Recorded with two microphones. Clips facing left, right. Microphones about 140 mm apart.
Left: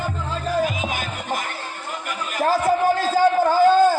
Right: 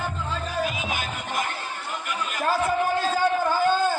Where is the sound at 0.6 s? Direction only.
40° left (ahead or behind).